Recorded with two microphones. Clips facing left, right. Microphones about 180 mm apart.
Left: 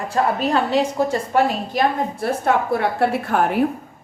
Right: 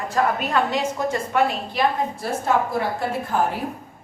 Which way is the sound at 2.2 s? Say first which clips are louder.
Left 3 dB; 65° left (ahead or behind).